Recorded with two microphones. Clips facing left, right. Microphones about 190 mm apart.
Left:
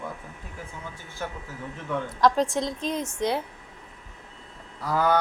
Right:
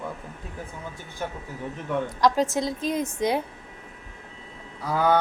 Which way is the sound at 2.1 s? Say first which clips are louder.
Left 1 dB; centre (ahead or behind).